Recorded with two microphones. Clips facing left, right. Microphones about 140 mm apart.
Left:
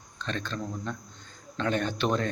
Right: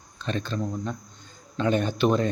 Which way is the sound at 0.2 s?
10° right (ahead or behind).